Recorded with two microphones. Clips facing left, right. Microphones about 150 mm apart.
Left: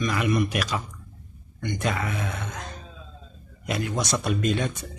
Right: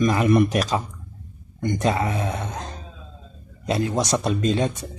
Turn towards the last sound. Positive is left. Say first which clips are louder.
# right 4 dB
turn(degrees=-30)  # may be behind; listen again after turning